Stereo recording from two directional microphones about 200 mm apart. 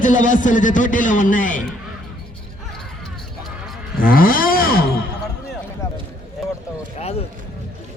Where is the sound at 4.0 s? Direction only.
45° left (ahead or behind).